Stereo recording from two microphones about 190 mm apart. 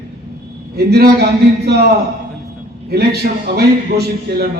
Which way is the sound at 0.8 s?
55° right (ahead or behind).